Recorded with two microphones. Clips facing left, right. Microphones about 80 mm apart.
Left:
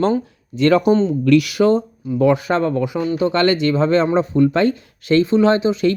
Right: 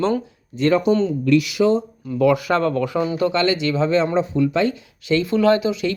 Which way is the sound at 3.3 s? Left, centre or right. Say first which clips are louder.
Left 3 dB; left.